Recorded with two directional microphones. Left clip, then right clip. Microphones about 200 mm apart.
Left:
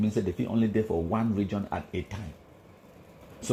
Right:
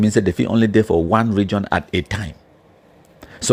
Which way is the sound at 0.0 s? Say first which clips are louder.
Right 12 dB; 45° right (ahead or behind).